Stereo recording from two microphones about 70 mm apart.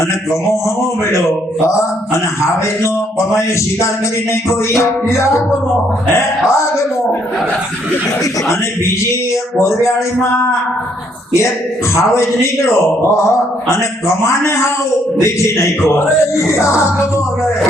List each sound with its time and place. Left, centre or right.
2.1 s a man's voice: left
9.6 s a man's voice: left
11.9 s a man's voice: left